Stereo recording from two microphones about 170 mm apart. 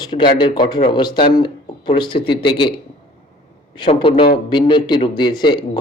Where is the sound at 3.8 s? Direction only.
30° left (ahead or behind).